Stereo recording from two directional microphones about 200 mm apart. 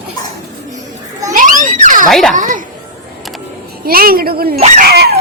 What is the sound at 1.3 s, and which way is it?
Children playing, 40° right (ahead or behind).